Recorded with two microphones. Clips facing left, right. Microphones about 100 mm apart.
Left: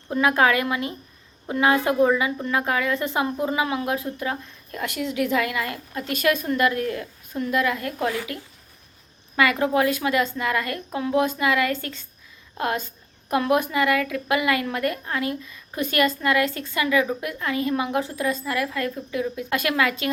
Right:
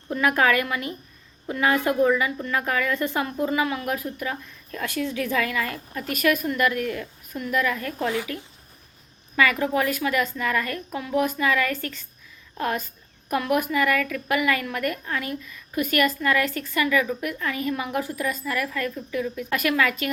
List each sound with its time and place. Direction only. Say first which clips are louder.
0.1 s a woman's voice: left 1 dB; 25° left (ahead or behind)
6.1 s a woman's voice: left 1 dB; 30° left (ahead or behind)
7.7 s a woman's voice: left 1 dB; 15° left (ahead or behind)
8.0 s a woman's voice: even; 20° right (ahead or behind)
9.3 s a woman's voice: left 1 dB; 20° left (ahead or behind)